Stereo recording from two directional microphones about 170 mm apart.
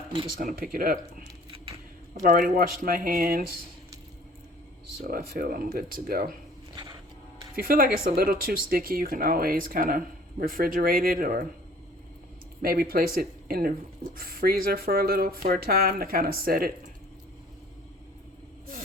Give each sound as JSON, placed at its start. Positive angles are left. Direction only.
{"t": 0.7, "sound": "speech", "side_deg": -60}
{"t": 2.2, "sound": "speech", "side_deg": -50}
{"t": 5.0, "sound": "speech", "side_deg": -55}
{"t": 7.5, "sound": "speech", "side_deg": -60}
{"t": 12.6, "sound": "speech", "side_deg": -60}